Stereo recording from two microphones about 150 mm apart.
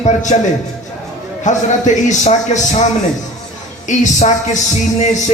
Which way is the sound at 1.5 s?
55° left (ahead or behind).